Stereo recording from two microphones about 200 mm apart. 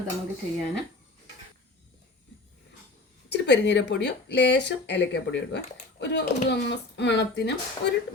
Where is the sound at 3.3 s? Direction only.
60° left (ahead or behind).